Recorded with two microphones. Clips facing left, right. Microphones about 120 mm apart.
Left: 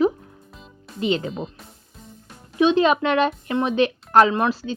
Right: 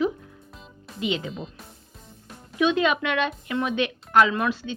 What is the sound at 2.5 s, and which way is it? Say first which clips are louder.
Speech: left 5 dB; 30° left (ahead or behind).